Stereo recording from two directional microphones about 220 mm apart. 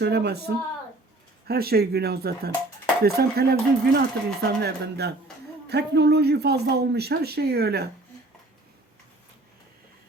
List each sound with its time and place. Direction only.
0.0 s speech: 50° right (ahead or behind)